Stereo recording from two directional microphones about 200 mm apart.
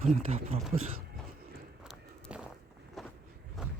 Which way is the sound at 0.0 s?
35° right (ahead or behind).